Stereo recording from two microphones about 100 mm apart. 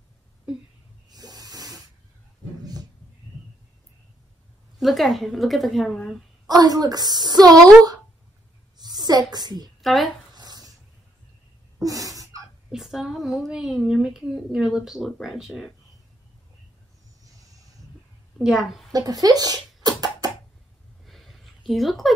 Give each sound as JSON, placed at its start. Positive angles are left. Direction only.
{"t": 1.1, "sound": "snake", "side_deg": -40}
{"t": 4.7, "sound": "a woman's voice", "side_deg": 0}
{"t": 6.4, "sound": "a woman's voice", "side_deg": -40}
{"t": 8.7, "sound": "a sound", "side_deg": -45}
{"t": 9.3, "sound": "a woman's voice", "side_deg": -45}
{"t": 9.8, "sound": "speech", "side_deg": 0}
{"t": 10.3, "sound": "dishes", "side_deg": -40}
{"t": 11.8, "sound": "sneeze", "side_deg": -35}
{"t": 12.7, "sound": "a woman's voice", "side_deg": -5}
{"t": 17.2, "sound": "a sound", "side_deg": -35}
{"t": 18.4, "sound": "a woman's voice", "side_deg": -5}
{"t": 18.9, "sound": "a sound", "side_deg": -40}
{"t": 21.0, "sound": "a sound", "side_deg": 0}